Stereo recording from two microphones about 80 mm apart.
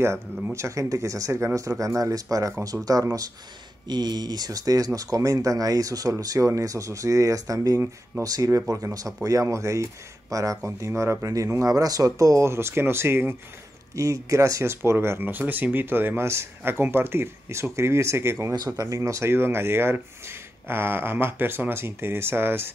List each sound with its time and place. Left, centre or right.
0.6 s speech: right
3.8 s speech: right
13.9 s speech: right